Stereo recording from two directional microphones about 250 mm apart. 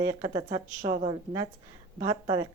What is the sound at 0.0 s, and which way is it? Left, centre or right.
A woman's voice, centre.